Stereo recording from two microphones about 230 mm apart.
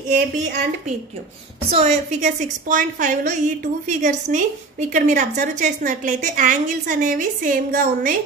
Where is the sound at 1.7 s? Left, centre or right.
Right.